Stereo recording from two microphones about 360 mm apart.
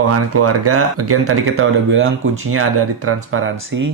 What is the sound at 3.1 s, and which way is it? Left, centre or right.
Speech, right.